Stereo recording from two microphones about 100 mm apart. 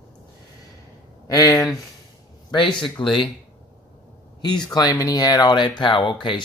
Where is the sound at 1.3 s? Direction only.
35° left (ahead or behind).